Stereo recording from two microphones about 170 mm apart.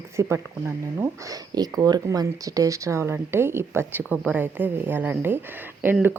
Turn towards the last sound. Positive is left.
turn(degrees=-10)  # may be behind; listen again after turning